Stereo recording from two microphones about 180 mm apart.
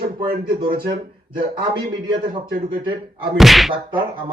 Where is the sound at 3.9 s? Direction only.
25° right (ahead or behind).